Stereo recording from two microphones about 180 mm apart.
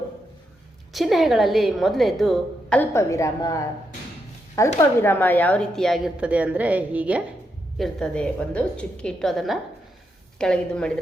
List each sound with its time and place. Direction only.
0.9 s speech: centre (ahead or behind)
2.9 s a woman's voice: 15° left (ahead or behind); by 7.2 s 10° right (ahead or behind)
7.8 s speech: 5° left (ahead or behind)